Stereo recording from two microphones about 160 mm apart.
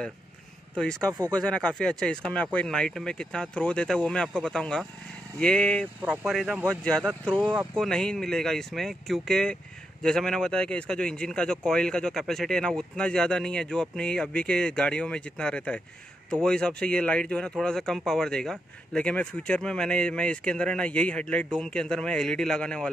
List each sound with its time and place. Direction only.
0.7 s speech: 5° left (ahead or behind)